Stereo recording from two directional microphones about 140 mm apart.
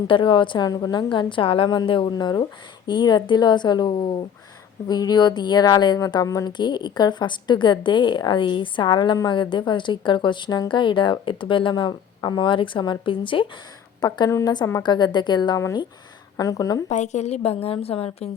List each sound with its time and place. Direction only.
0.1 s speech: 35° left (ahead or behind)
14.0 s a woman's voice: 25° left (ahead or behind)
16.9 s a woman's voice: 55° left (ahead or behind)